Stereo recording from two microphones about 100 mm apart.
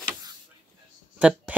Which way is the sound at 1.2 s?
10° right (ahead or behind).